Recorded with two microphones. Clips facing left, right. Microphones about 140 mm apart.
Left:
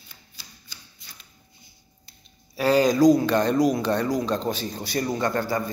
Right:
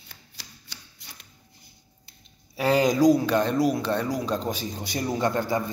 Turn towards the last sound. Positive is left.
turn(degrees=-20)  # may be behind; listen again after turning